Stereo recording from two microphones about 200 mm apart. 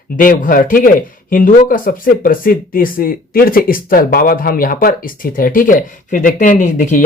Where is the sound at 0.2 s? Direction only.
40° left (ahead or behind).